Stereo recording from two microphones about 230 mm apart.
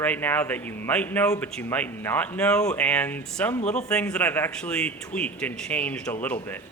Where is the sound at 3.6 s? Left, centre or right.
Left.